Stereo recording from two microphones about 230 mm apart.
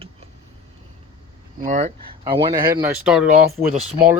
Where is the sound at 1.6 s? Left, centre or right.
Right.